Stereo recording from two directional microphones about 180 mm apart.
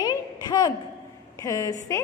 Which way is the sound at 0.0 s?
20° left (ahead or behind).